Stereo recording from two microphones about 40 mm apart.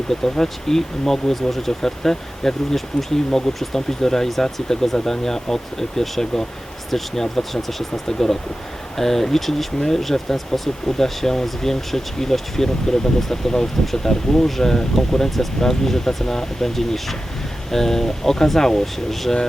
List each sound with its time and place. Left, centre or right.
0.1 s speech: centre